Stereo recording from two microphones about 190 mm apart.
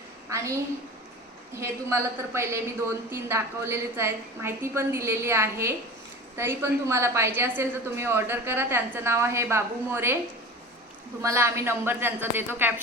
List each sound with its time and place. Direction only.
0.3 s a sound: 15° right (ahead or behind)
1.5 s a woman's voice: 15° right (ahead or behind)
11.2 s a woman's voice: 15° right (ahead or behind)